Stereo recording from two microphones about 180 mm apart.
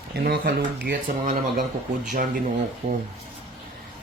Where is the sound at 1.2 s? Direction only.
45° right (ahead or behind).